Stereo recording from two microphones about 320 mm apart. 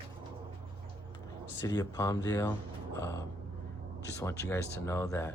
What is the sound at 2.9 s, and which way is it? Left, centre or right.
Gasp, centre.